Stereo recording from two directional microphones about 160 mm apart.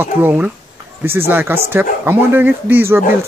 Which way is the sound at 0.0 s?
15° right (ahead or behind).